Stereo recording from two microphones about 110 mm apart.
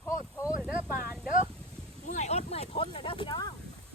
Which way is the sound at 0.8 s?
20° right (ahead or behind).